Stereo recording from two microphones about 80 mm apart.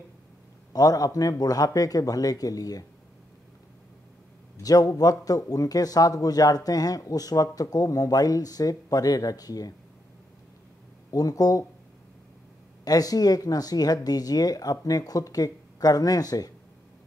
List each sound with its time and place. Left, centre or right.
0.7 s speech: left
4.6 s speech: left
11.1 s speech: left
12.8 s speech: left